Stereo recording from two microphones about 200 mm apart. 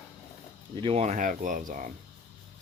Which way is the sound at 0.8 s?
30° right (ahead or behind).